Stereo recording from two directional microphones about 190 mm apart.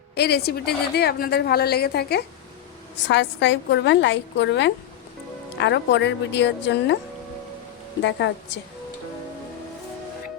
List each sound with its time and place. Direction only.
0.1 s a woman's voice: 60° left (ahead or behind)
3.1 s a woman's voice: 70° left (ahead or behind)
8.0 s a woman's voice: 70° left (ahead or behind)